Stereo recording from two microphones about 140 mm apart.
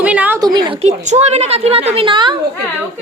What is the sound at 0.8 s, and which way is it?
A woman's voice, 55° right (ahead or behind).